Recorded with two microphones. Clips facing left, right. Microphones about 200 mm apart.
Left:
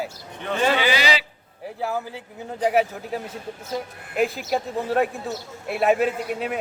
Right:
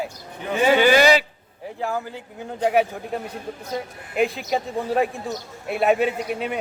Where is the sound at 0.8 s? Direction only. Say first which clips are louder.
Right 7 dB; 50° right (ahead or behind).